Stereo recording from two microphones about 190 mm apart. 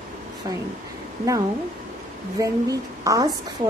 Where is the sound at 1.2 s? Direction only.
15° right (ahead or behind).